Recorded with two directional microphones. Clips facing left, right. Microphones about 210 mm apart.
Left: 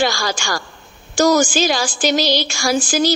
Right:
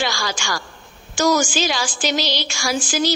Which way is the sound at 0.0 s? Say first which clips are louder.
Left 5 dB; 40° left (ahead or behind).